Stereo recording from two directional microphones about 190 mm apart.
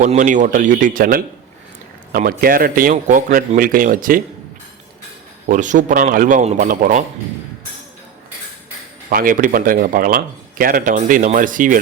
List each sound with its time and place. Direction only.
0.0 s speech: 40° right (ahead or behind)
5.5 s speech: 40° right (ahead or behind)
9.0 s speech: 45° right (ahead or behind)